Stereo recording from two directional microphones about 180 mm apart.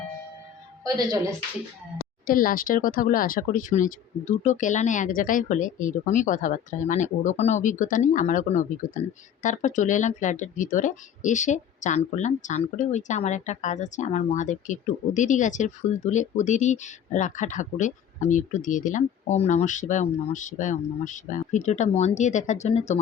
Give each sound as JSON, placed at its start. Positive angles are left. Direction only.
{"t": 2.2, "sound": "speech", "side_deg": 50}